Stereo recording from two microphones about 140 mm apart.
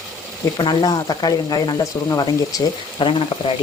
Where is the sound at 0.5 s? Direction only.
35° left (ahead or behind).